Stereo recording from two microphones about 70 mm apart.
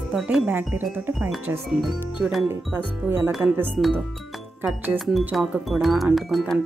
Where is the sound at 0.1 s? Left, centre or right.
Centre.